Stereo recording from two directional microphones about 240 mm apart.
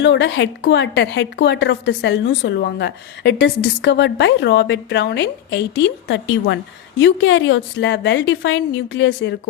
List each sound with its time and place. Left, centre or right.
0.0 s a woman's voice: left